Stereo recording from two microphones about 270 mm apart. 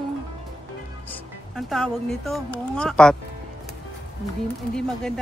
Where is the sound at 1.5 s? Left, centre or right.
Centre.